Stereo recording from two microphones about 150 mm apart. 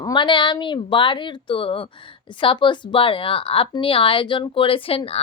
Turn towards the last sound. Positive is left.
turn(degrees=40)  # may be behind; listen again after turning